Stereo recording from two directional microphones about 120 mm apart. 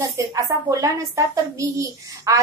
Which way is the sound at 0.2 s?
30° right (ahead or behind).